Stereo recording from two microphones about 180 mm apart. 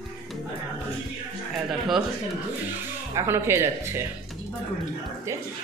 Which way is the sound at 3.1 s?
15° right (ahead or behind).